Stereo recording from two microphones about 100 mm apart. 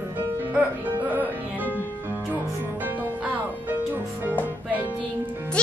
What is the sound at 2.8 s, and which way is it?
Music, 20° right (ahead or behind).